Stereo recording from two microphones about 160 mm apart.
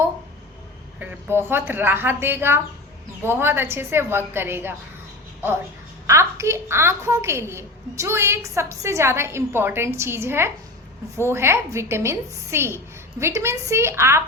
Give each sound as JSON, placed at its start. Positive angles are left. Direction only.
{"t": 0.9, "sound": "a woman's voice", "side_deg": -10}
{"t": 6.1, "sound": "a woman's voice", "side_deg": -15}